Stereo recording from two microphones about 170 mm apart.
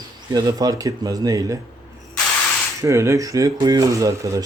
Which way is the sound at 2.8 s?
15° right (ahead or behind).